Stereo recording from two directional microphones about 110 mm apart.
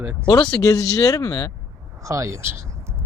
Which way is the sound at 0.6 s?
35° left (ahead or behind).